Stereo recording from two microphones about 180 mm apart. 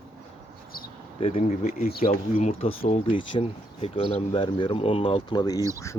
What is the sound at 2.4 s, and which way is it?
Speech, 35° left (ahead or behind).